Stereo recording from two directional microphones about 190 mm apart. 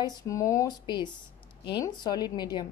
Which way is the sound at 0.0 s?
15° left (ahead or behind).